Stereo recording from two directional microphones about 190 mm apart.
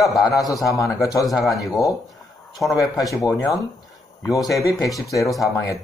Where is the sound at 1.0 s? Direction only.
15° left (ahead or behind).